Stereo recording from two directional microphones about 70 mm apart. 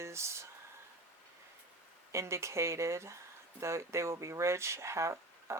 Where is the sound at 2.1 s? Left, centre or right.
Right.